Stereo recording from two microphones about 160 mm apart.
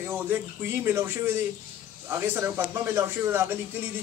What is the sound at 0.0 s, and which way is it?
Speech, 15° right (ahead or behind).